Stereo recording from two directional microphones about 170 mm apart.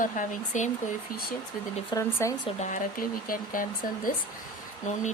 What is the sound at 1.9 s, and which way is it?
Speech, 15° left (ahead or behind).